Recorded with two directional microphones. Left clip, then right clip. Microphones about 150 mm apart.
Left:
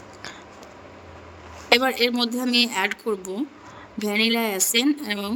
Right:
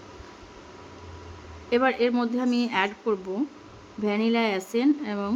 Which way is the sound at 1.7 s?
90° left.